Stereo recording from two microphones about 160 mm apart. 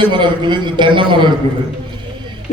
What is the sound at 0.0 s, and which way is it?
A man's voice, 30° right (ahead or behind).